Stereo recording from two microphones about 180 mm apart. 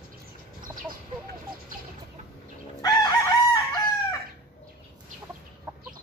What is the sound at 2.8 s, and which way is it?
Chicken, 20° left (ahead or behind).